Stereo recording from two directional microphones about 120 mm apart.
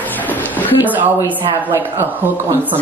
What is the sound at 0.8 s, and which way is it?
Speech, 15° right (ahead or behind).